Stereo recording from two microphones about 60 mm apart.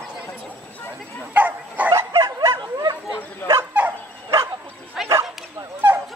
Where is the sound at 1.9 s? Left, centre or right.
Right.